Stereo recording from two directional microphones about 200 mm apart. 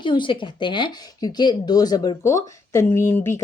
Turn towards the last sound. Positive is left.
turn(degrees=10)  # may be behind; listen again after turning